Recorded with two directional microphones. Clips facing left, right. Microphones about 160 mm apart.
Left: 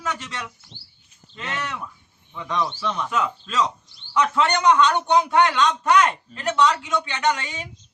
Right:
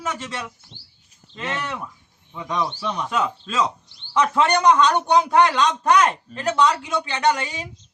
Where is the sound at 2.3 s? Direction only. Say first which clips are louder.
Even; 15° right (ahead or behind).